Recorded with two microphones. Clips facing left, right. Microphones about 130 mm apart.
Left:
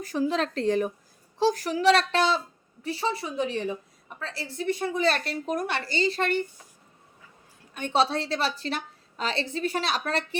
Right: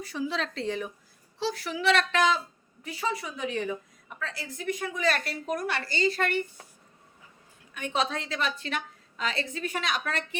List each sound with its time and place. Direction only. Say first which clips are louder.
0.0 s a woman's voice: left 5 dB; 45° left (ahead or behind); by 6.4 s 30° left (ahead or behind)
7.7 s a woman's voice: left 5 dB; 35° left (ahead or behind)